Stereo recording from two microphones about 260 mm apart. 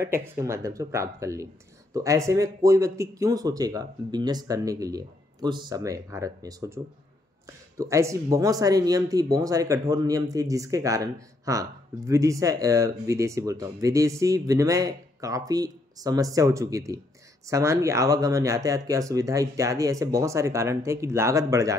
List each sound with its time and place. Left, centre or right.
0.0 s speech: centre